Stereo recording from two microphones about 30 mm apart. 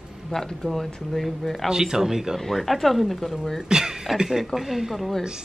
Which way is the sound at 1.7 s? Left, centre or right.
Centre.